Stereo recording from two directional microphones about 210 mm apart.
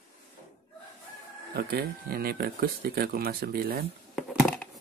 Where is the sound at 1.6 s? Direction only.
45° right (ahead or behind).